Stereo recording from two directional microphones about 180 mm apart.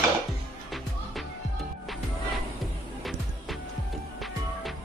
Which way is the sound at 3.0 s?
Centre (ahead or behind).